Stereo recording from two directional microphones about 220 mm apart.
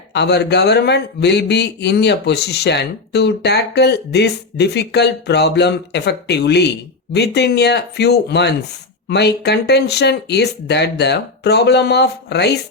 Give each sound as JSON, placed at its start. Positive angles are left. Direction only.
{"t": 0.1, "sound": "a man's voice", "side_deg": 50}